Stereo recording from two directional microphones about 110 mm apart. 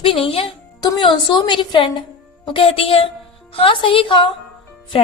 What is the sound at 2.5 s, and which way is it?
A woman's voice, 60° left (ahead or behind).